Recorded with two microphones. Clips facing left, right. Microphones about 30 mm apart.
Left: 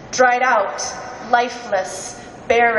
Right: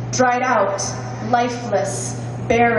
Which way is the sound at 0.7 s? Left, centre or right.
Centre.